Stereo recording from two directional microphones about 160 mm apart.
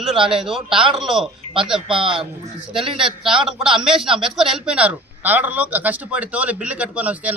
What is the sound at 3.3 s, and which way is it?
A man's voice, 5° right (ahead or behind).